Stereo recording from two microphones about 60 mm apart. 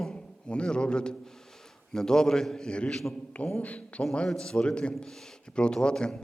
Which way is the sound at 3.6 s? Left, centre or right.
Left.